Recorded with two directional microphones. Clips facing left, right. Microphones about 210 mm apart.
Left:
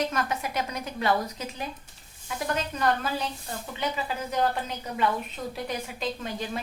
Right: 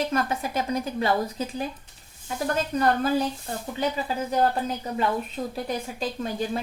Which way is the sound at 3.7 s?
35° right (ahead or behind).